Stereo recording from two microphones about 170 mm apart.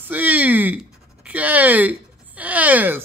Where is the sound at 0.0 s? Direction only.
10° right (ahead or behind).